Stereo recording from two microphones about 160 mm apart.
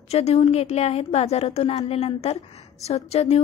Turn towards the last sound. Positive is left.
turn(degrees=40)  # may be behind; listen again after turning